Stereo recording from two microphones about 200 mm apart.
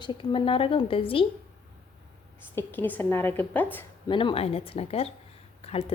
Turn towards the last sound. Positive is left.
turn(degrees=30)  # may be behind; listen again after turning